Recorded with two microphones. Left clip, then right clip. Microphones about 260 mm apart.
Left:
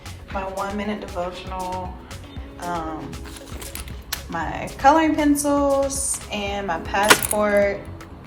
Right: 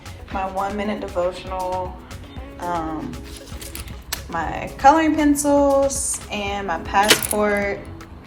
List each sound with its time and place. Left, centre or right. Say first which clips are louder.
0.3 s a woman's voice: right 3 dB; centre